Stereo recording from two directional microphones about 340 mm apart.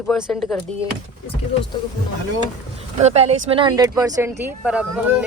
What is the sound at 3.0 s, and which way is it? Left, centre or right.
Speech, centre.